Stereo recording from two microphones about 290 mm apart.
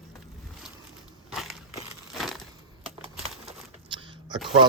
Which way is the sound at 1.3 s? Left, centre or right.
Centre.